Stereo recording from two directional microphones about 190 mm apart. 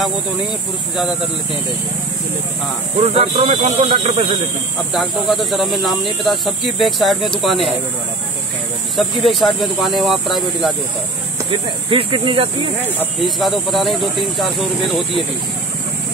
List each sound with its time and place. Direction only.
3.0 s speech: 30° right (ahead or behind)
4.9 s speech: centre (ahead or behind)
8.9 s speech: centre (ahead or behind)
11.9 s speech: 25° right (ahead or behind)
12.8 s speech: 5° right (ahead or behind)